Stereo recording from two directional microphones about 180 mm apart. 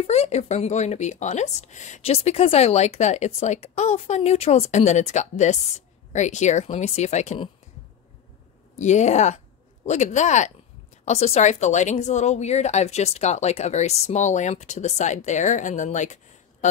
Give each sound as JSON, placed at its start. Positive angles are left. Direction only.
{"t": 0.0, "sound": "speech", "side_deg": 35}
{"t": 8.7, "sound": "speech", "side_deg": 40}